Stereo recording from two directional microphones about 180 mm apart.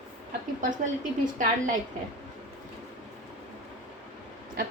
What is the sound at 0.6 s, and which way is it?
A woman's voice, 45° right (ahead or behind).